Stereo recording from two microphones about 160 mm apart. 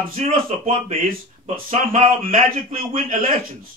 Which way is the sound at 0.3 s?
35° right (ahead or behind).